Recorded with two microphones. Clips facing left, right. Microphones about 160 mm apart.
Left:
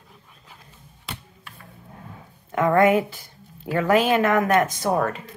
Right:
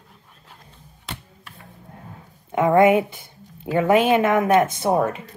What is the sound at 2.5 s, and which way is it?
Speech, 20° right (ahead or behind).